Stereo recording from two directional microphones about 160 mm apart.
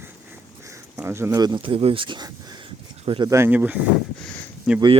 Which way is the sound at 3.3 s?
15° right (ahead or behind).